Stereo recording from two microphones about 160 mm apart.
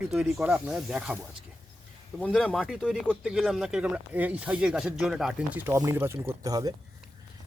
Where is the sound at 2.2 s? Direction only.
5° left (ahead or behind).